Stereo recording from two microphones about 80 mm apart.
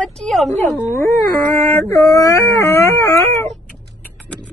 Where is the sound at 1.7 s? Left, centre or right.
Left.